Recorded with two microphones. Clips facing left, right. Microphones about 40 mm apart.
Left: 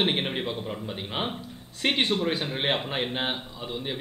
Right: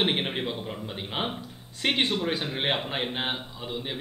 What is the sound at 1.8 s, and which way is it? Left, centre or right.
Speech, centre.